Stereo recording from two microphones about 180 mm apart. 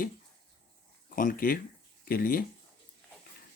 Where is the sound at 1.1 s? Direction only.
50° left (ahead or behind).